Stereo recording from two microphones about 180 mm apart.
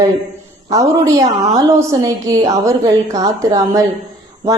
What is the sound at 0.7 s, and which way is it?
A woman's voice, 20° right (ahead or behind).